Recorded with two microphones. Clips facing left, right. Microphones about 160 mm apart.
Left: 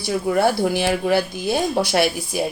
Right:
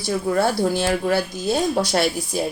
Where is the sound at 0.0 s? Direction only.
15° left (ahead or behind).